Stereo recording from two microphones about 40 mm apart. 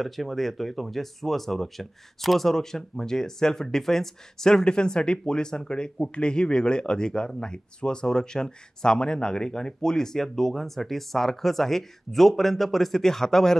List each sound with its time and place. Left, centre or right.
0.0 s speech: centre
4.6 s speech: left